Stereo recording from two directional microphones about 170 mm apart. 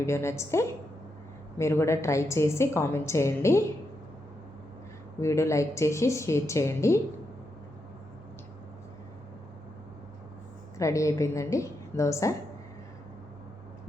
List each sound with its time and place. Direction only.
0.0 s a woman's voice: 15° left (ahead or behind)
5.2 s a woman's voice: 15° left (ahead or behind)
10.8 s a woman's voice: 20° left (ahead or behind)